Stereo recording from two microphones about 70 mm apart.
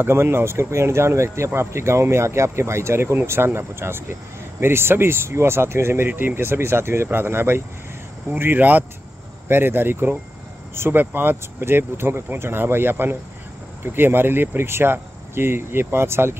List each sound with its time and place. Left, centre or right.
0.0 s speech: right